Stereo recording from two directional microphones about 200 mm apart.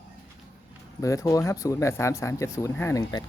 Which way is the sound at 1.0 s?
15° left (ahead or behind).